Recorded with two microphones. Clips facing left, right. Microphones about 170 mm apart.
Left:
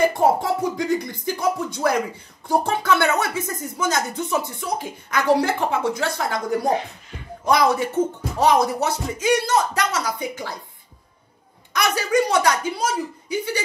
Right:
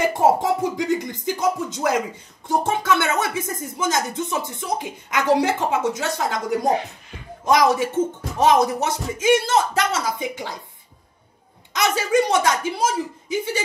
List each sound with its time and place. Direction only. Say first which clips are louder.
0.2 s speech: right 1 dB; 20° right (ahead or behind)
11.7 s speech: right 1 dB; 25° right (ahead or behind)